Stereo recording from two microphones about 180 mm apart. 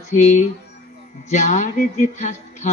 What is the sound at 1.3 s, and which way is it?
Speech, 40° left (ahead or behind).